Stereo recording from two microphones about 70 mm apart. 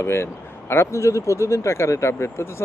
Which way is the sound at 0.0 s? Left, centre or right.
Left.